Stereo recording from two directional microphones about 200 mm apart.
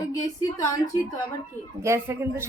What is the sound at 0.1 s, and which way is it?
Speech, 15° left (ahead or behind).